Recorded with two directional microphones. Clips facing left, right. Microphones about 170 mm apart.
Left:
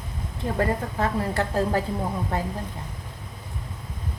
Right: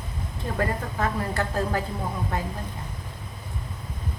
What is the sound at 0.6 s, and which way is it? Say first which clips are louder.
A woman's voice: left 2 dB; 30° left (ahead or behind).